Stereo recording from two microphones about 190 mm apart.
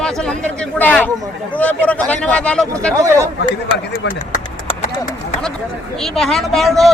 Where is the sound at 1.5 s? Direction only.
10° left (ahead or behind).